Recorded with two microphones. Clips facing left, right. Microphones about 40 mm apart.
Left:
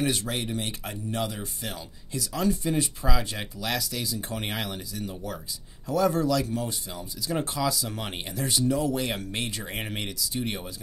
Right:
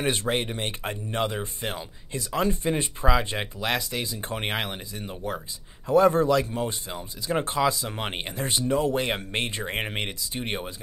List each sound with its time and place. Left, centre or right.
0.0 s speech: right